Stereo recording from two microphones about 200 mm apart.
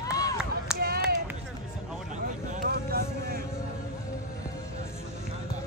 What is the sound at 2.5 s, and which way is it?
Vehicle, 45° right (ahead or behind).